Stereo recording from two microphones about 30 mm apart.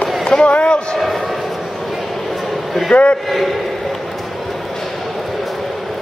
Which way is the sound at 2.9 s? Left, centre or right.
Left.